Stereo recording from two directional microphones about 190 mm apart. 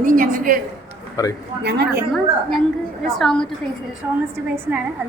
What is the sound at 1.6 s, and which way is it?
Speech, 60° right (ahead or behind).